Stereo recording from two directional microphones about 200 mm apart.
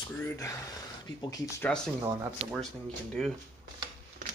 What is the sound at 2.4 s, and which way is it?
Speech, 30° right (ahead or behind).